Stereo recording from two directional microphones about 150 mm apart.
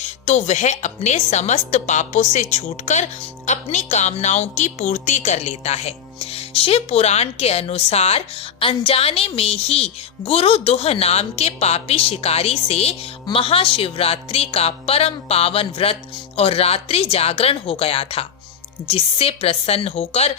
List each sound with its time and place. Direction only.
0.0 s speech: 50° left (ahead or behind)